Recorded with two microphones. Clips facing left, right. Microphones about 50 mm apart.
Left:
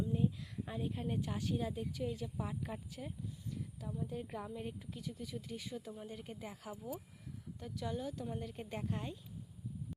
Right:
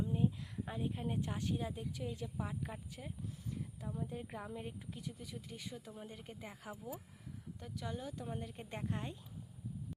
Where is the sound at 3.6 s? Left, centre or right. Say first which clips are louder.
Even; centre.